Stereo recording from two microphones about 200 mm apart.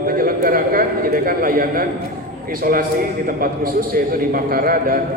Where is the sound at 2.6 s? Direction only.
45° right (ahead or behind).